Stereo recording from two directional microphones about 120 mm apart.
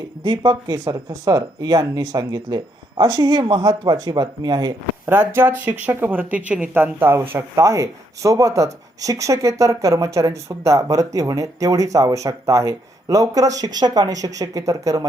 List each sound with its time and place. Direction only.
0.2 s speech: 40° right (ahead or behind)
1.1 s speech: 30° right (ahead or behind)
5.0 s speech: 20° right (ahead or behind)